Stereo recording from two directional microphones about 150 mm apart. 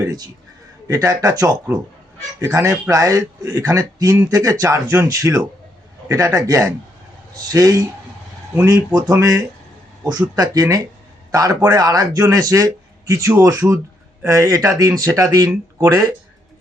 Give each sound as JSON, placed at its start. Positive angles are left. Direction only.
{"t": 0.9, "sound": "a man's voice", "side_deg": -25}